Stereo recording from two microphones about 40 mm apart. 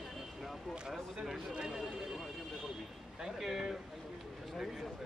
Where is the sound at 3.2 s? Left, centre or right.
Centre.